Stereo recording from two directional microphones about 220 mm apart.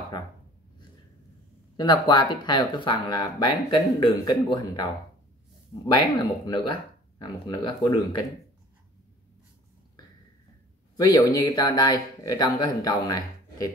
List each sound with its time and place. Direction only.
1.8 s speech: 20° left (ahead or behind)
5.9 s speech: 20° left (ahead or behind)
11.0 s speech: 15° left (ahead or behind)